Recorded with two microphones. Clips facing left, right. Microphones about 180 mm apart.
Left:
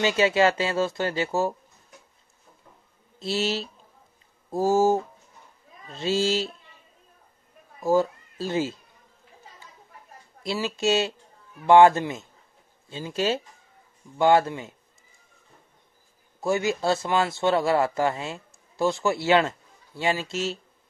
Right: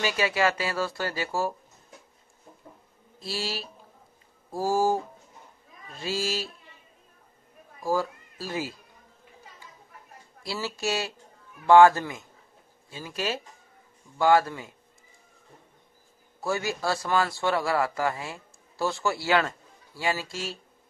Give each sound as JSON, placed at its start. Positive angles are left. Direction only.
{"t": 0.0, "sound": "a man's voice", "side_deg": 25}
{"t": 3.2, "sound": "a man's voice", "side_deg": 25}
{"t": 7.8, "sound": "speech", "side_deg": 25}
{"t": 10.4, "sound": "a man's voice", "side_deg": 20}
{"t": 16.3, "sound": "a man's voice", "side_deg": 20}